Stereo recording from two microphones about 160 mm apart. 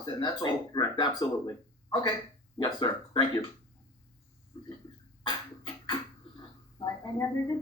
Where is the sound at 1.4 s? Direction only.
25° left (ahead or behind).